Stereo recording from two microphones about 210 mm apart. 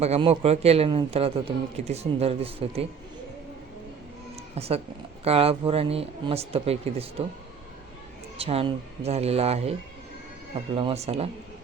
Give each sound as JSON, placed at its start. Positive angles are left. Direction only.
{"t": 0.0, "sound": "a man's voice", "side_deg": -30}
{"t": 4.5, "sound": "a man's voice", "side_deg": -30}
{"t": 8.4, "sound": "a man's voice", "side_deg": -30}
{"t": 10.8, "sound": "a man's voice", "side_deg": -30}